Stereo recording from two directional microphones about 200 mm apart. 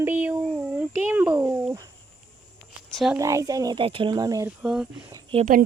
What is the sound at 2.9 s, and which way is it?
Speech, centre (ahead or behind).